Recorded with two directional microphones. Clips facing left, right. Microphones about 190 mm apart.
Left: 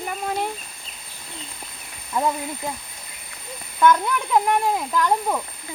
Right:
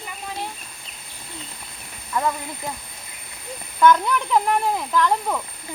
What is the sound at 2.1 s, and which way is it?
Snake, 20° left (ahead or behind).